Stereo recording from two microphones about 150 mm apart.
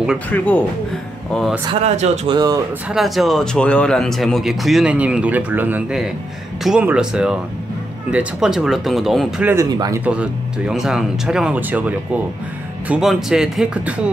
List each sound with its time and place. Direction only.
0.3 s speech: 10° left (ahead or behind)
1.7 s speech: 45° right (ahead or behind)
2.3 s speech: 25° right (ahead or behind)
2.9 s speech: centre (ahead or behind)
9.4 s speech: 15° right (ahead or behind)
9.7 s speech: 25° right (ahead or behind)
10.0 s speech: 10° right (ahead or behind)